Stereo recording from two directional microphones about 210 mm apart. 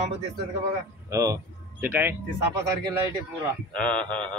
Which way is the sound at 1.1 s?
15° right (ahead or behind).